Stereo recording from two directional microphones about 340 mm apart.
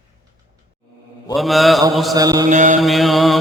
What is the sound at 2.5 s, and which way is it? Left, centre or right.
Mantra, right.